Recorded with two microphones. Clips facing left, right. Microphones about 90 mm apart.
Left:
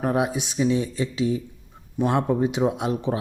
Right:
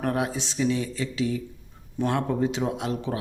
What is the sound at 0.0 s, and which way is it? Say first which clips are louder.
Speech: left 3 dB; 15° left (ahead or behind).